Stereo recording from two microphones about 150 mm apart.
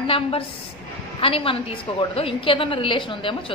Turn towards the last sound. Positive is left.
turn(degrees=35)  # may be behind; listen again after turning